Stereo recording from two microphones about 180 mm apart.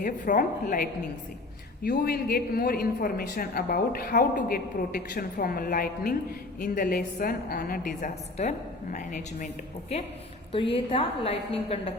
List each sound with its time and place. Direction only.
0.0 s a woman's voice: 45° left (ahead or behind)